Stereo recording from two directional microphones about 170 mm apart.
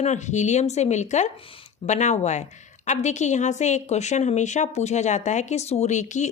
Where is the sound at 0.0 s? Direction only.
45° left (ahead or behind).